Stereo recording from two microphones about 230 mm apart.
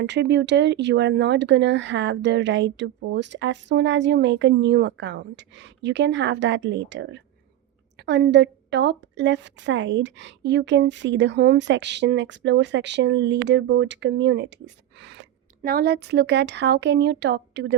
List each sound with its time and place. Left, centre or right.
0.0 s speech: right